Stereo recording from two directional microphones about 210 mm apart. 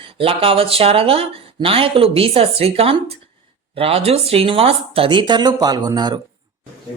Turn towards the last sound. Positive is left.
turn(degrees=-20)  # may be behind; listen again after turning